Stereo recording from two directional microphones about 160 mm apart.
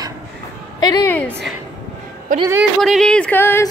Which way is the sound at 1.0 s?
10° left (ahead or behind).